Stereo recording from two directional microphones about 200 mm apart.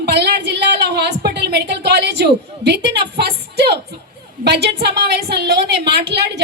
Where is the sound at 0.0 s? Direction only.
55° right (ahead or behind).